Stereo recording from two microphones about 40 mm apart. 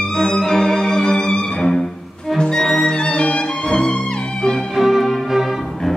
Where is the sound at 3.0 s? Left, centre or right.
Left.